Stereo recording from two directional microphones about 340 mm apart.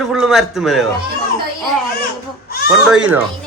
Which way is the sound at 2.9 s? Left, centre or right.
Centre.